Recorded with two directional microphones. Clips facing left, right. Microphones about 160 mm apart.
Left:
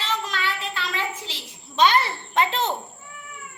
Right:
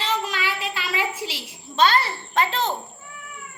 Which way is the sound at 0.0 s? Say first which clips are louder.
Right 2 dB; 10° right (ahead or behind).